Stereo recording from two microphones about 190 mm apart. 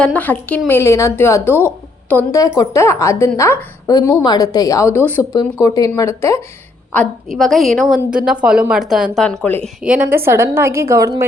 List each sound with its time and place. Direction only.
0.0 s a woman's voice: 10° left (ahead or behind)
6.9 s a woman's voice: 5° left (ahead or behind)
9.8 s a woman's voice: 10° right (ahead or behind)